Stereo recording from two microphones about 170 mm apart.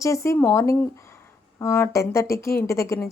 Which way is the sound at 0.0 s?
15° left (ahead or behind).